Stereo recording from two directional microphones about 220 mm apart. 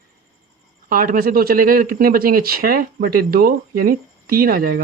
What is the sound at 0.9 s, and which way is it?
Speech, 40° right (ahead or behind).